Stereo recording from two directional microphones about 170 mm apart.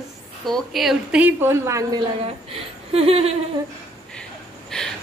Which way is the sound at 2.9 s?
35° right (ahead or behind).